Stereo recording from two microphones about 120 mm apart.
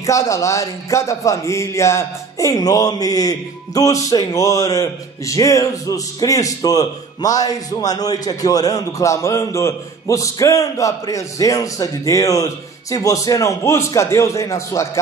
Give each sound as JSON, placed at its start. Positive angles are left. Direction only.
{"t": 0.0, "sound": "speech", "side_deg": 25}